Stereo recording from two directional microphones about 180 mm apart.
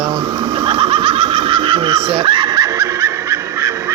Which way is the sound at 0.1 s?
25° right (ahead or behind).